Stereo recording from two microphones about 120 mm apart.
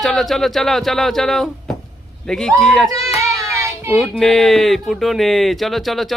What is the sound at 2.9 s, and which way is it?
Child singing, 25° right (ahead or behind).